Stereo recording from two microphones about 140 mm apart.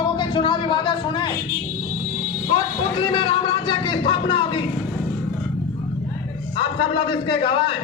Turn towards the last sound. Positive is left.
turn(degrees=35)  # may be behind; listen again after turning